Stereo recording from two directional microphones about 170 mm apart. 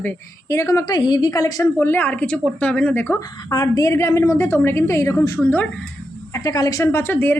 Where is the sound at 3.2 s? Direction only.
25° left (ahead or behind).